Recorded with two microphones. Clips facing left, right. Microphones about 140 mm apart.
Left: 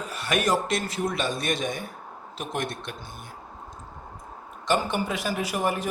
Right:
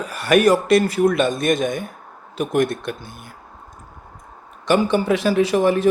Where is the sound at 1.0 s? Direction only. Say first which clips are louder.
Right 10 dB; 50° right (ahead or behind).